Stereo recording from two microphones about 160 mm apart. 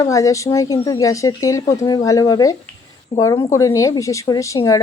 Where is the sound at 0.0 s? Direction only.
20° left (ahead or behind).